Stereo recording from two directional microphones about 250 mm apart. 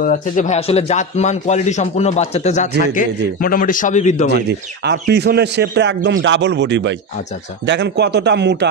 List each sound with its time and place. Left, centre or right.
0.0 s a man's voice: left
4.3 s a man's voice: right